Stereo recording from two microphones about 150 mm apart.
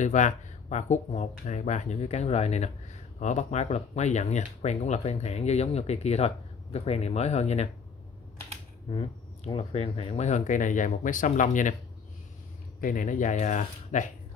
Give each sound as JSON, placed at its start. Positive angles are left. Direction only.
{"t": 0.0, "sound": "speech", "side_deg": 55}
{"t": 9.5, "sound": "speech", "side_deg": 40}
{"t": 12.8, "sound": "speech", "side_deg": 60}